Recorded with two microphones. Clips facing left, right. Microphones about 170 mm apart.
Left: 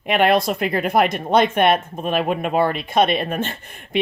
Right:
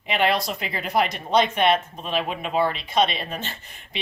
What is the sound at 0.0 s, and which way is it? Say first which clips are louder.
Speech: left 6 dB; 55° left (ahead or behind).